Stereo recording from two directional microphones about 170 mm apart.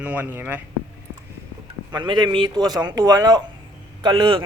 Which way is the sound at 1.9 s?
30° right (ahead or behind).